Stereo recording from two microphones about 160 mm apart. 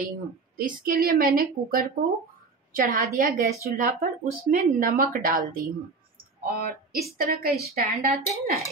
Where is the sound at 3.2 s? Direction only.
60° right (ahead or behind).